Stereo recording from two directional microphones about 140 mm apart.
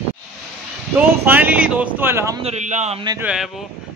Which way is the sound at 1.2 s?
15° right (ahead or behind).